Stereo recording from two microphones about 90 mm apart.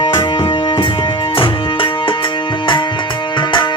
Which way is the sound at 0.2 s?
65° left (ahead or behind).